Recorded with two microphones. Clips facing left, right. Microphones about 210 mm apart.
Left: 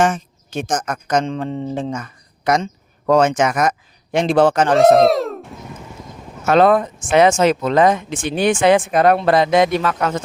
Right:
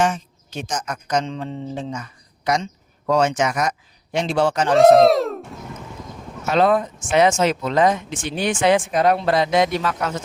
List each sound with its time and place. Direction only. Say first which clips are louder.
0.0 s speech: left 3 dB; 50° left (ahead or behind)
4.8 s speech: right 1 dB; centre (ahead or behind)
6.4 s speech: left 4 dB; 55° left (ahead or behind)